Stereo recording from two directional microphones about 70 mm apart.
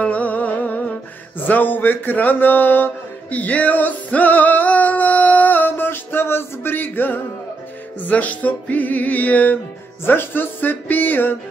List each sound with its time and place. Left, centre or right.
0.0 s music: left
1.4 s a sound: left
8.0 s music: left